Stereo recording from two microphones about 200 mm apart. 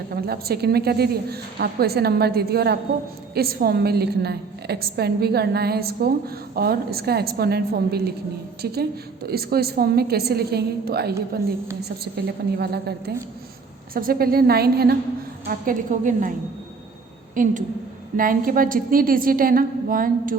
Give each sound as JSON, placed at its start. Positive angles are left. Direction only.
{"t": 0.1, "sound": "a woman's voice", "side_deg": -50}
{"t": 13.9, "sound": "a woman's voice", "side_deg": -50}
{"t": 17.3, "sound": "a woman's voice", "side_deg": -40}